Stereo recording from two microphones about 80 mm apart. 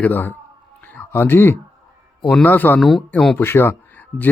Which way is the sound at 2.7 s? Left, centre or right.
Centre.